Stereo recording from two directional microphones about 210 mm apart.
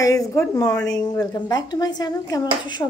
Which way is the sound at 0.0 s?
15° left (ahead or behind).